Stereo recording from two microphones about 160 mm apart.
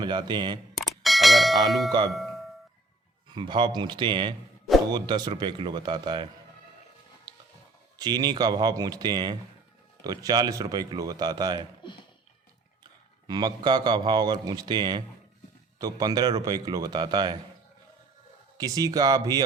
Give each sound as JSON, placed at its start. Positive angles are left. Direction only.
{"t": 0.0, "sound": "a man's voice", "side_deg": -30}
{"t": 0.8, "sound": "bell", "side_deg": 0}
{"t": 1.9, "sound": "a man's voice", "side_deg": -25}
{"t": 3.3, "sound": "a man's voice", "side_deg": -30}
{"t": 7.9, "sound": "a man's voice", "side_deg": -25}
{"t": 11.8, "sound": "speech", "side_deg": 30}
{"t": 12.8, "sound": "a man's voice", "side_deg": -25}
{"t": 18.5, "sound": "a man's voice", "side_deg": -20}